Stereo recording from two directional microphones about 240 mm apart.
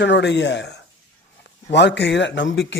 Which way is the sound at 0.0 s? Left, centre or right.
Left.